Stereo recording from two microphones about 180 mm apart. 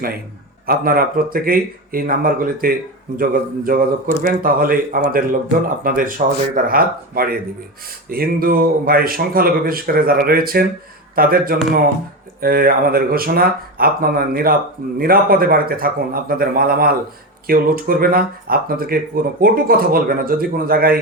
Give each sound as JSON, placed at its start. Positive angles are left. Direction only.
{"t": 0.7, "sound": "speech", "side_deg": -55}